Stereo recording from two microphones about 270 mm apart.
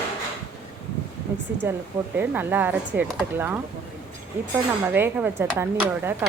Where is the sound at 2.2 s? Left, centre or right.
Centre.